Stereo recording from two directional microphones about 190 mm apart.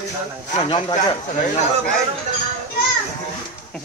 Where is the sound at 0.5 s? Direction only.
30° left (ahead or behind).